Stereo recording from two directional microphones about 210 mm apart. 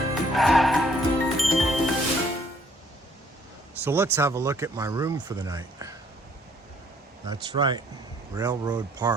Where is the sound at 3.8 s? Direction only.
10° right (ahead or behind).